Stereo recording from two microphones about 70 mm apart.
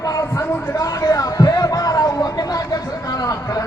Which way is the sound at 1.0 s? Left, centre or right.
Left.